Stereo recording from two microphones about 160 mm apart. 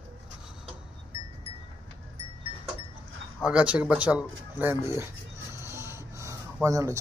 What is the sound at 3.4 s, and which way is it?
Speech, 5° right (ahead or behind).